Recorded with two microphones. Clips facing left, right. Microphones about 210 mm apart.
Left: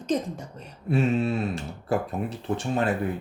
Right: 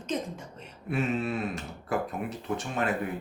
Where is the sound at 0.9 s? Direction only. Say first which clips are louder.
Left 5 dB; 30° left (ahead or behind).